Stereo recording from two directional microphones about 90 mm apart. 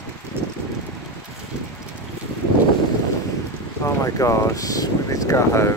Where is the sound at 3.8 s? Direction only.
30° left (ahead or behind).